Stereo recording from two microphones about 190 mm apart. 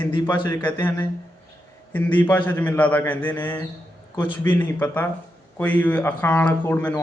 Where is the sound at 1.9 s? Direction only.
10° left (ahead or behind).